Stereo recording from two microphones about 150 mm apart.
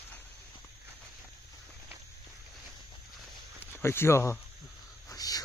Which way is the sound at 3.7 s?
15° left (ahead or behind).